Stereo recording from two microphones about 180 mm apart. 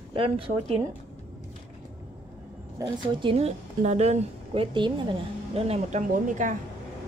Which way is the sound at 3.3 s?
40° right (ahead or behind).